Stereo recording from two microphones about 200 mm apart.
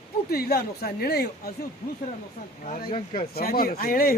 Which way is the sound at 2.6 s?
45° left (ahead or behind).